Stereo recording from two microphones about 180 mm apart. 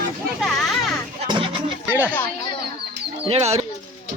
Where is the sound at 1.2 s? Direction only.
25° right (ahead or behind).